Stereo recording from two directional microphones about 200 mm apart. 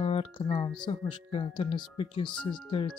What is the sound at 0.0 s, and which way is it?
Speech, 25° left (ahead or behind).